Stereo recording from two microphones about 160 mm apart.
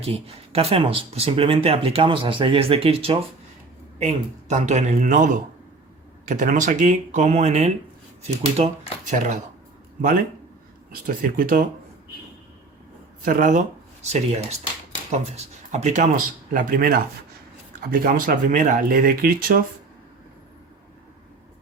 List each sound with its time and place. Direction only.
0.0 s speech: 40° right (ahead or behind)
11.0 s speech: 60° right (ahead or behind)
13.2 s speech: 55° right (ahead or behind)
15.7 s speech: 45° right (ahead or behind); by 19.5 s 65° right (ahead or behind)